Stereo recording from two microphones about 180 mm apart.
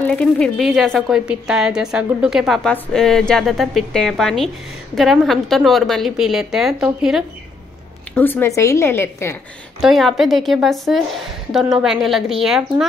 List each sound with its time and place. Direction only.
0.0 s a woman's voice: 5° left (ahead or behind)
8.1 s a woman's voice: 10° left (ahead or behind)
9.8 s a woman's voice: centre (ahead or behind)